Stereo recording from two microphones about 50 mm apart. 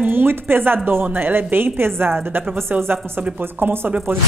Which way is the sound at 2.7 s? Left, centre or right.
Right.